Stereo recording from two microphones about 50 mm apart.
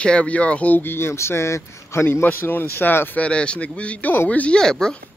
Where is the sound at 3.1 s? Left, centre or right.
Left.